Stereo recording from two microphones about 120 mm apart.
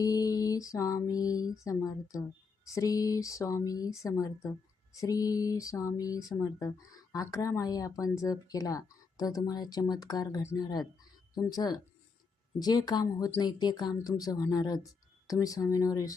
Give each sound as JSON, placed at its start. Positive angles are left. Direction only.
{"t": 0.0, "sound": "mantra", "side_deg": 30}
{"t": 10.6, "sound": "a woman's voice", "side_deg": 35}
{"t": 15.3, "sound": "mantra", "side_deg": 30}